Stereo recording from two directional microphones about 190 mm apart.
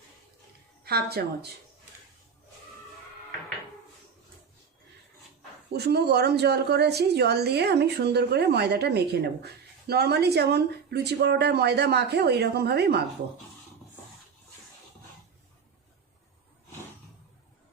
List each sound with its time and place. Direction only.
0.9 s a woman's voice: 55° right (ahead or behind)
5.7 s a woman's voice: 60° right (ahead or behind)